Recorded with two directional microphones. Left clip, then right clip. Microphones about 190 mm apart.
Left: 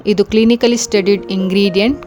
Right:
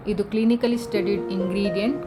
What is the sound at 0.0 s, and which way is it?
A woman's voice, 50° left (ahead or behind).